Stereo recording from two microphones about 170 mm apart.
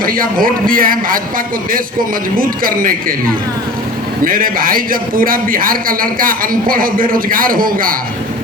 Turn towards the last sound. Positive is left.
turn(degrees=-55)  # may be behind; listen again after turning